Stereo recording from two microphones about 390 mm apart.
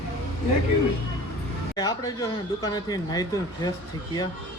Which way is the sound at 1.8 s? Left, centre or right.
Centre.